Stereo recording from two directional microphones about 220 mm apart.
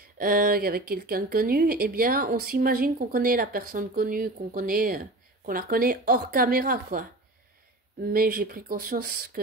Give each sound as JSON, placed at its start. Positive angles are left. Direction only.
{"t": 0.2, "sound": "speech", "side_deg": -40}
{"t": 8.1, "sound": "speech", "side_deg": -40}